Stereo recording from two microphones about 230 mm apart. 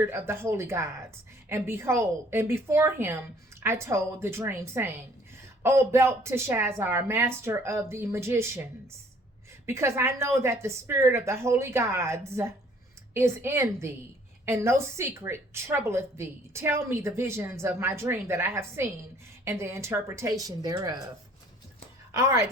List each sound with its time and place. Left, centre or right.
0.0 s a woman's voice: centre
9.6 s a woman's voice: centre
22.1 s a woman's voice: centre